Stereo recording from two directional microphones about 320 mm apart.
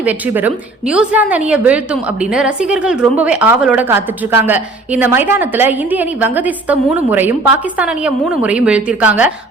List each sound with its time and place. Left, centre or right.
0.0 s a woman's voice: centre